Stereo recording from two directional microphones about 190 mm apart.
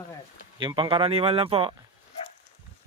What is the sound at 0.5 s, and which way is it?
A man's voice, 25° right (ahead or behind).